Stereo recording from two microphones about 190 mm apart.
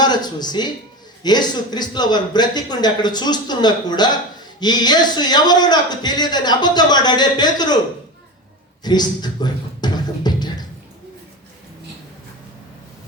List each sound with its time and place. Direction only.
0.0 s a man's voice: 20° left (ahead or behind)
8.8 s beatboxing: 20° left (ahead or behind)